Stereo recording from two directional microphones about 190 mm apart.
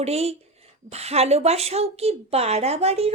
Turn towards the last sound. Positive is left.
turn(degrees=-35)  # may be behind; listen again after turning